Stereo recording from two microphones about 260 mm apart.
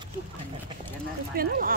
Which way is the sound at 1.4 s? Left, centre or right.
Right.